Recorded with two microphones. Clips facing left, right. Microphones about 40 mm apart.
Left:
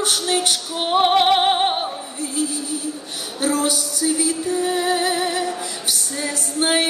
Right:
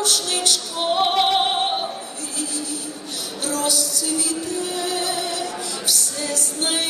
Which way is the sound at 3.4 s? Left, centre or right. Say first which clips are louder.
Left 4 dB; left.